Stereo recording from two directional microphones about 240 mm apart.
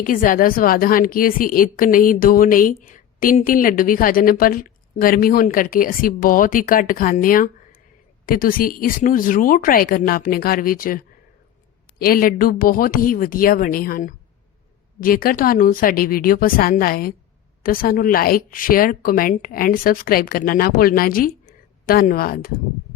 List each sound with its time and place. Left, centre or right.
0.0 s a woman's voice: left